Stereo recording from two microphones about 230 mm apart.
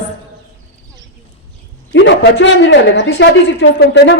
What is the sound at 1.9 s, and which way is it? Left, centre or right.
Speech, left.